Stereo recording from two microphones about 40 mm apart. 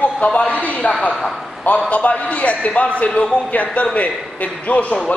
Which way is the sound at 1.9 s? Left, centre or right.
Left.